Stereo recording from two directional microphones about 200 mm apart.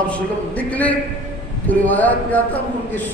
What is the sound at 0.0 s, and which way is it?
A man's voice, 5° left (ahead or behind).